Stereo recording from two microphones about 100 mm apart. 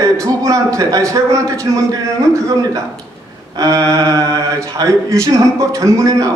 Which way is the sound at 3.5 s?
35° right (ahead or behind).